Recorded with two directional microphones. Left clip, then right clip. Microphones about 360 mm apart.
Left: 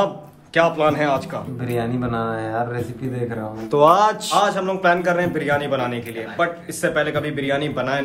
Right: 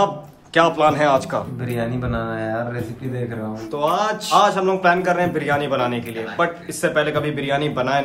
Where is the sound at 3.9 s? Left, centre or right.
Centre.